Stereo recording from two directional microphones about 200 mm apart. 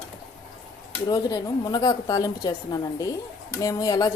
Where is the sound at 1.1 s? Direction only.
20° left (ahead or behind).